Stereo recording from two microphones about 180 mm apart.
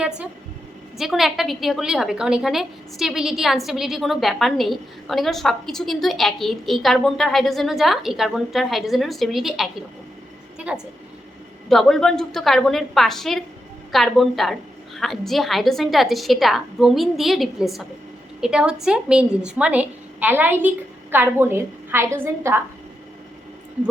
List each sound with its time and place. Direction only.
0.9 s a woman's voice: centre (ahead or behind)
11.7 s a woman's voice: centre (ahead or behind)